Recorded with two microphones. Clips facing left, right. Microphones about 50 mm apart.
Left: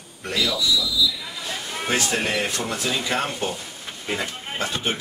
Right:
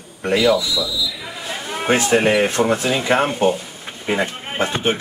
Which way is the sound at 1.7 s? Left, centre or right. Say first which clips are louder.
Right 8 dB; right.